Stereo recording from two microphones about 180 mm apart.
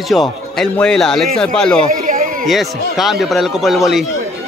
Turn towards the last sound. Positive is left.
turn(degrees=0)  # may be behind; listen again after turning